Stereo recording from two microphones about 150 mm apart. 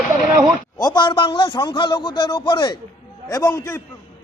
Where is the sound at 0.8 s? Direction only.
30° left (ahead or behind).